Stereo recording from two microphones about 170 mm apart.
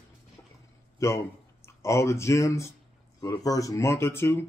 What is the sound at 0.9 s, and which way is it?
Speech, 15° left (ahead or behind).